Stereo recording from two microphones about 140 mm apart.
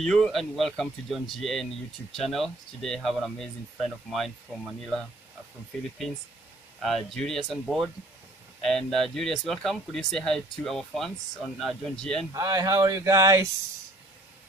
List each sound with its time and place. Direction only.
0.0 s speech: 5° left (ahead or behind)
6.8 s speech: centre (ahead or behind)
12.3 s speech: 25° right (ahead or behind)